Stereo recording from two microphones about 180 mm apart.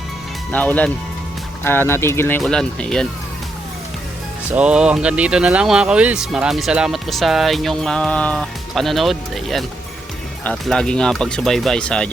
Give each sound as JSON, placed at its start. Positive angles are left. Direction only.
{"t": 0.5, "sound": "speech", "side_deg": 10}
{"t": 4.5, "sound": "speech", "side_deg": -5}